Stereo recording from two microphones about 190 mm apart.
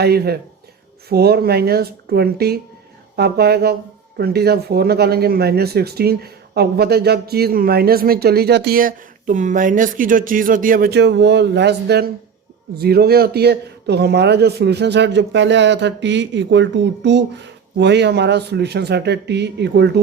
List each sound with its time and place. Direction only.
0.0 s speech: 55° right (ahead or behind)